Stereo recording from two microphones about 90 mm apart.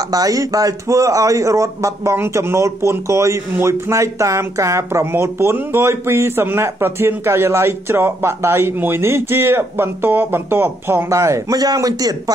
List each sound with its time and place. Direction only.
0.1 s a man's voice: 40° right (ahead or behind)